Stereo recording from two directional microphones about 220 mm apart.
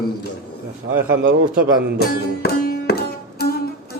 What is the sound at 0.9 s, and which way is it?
Speech, 60° right (ahead or behind).